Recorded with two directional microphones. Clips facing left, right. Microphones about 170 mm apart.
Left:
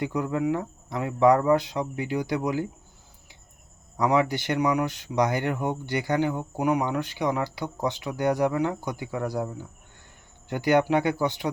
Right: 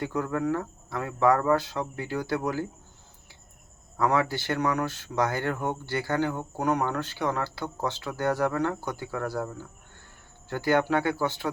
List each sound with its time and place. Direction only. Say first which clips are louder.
0.0 s speech: left 2 dB; 15° left (ahead or behind)
3.9 s speech: left 2 dB; 15° left (ahead or behind)